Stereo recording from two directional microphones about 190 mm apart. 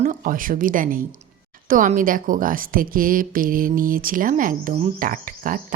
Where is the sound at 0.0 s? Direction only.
45° right (ahead or behind).